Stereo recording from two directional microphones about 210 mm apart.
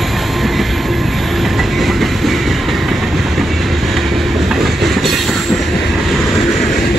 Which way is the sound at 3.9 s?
Centre (ahead or behind).